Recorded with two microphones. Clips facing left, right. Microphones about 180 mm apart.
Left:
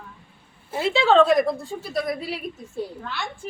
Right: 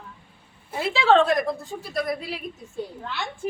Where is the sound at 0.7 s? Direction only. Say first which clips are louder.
Left 1 dB; centre (ahead or behind).